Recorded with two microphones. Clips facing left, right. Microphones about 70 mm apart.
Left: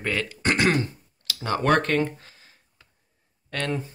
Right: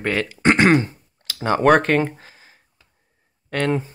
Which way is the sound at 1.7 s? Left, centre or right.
Centre.